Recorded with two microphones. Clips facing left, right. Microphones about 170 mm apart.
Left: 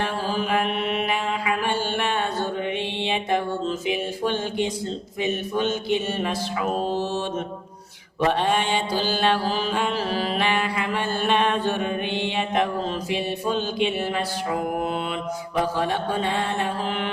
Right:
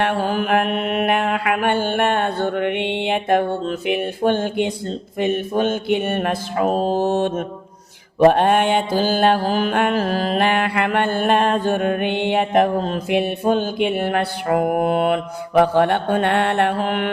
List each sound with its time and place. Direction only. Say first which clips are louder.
0.0 s mantra: right 6 dB; 60° right (ahead or behind)
6.7 s mantra: right 7 dB; 40° right (ahead or behind); by 17.1 s 60° right (ahead or behind)